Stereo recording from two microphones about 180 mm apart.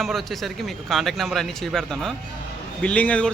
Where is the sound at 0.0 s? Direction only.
Centre (ahead or behind).